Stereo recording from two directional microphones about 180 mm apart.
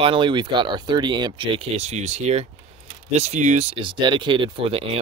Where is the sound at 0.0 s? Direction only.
25° right (ahead or behind).